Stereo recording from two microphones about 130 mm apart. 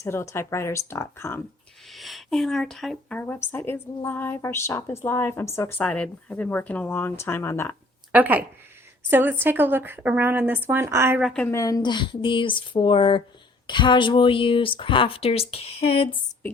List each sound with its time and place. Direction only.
0.0 s speech: 20° left (ahead or behind)
1.9 s speech: centre (ahead or behind)
3.2 s a woman's voice: 15° left (ahead or behind)
8.1 s speech: 10° right (ahead or behind)
11.5 s speech: 25° left (ahead or behind); by 16.1 s 50° left (ahead or behind)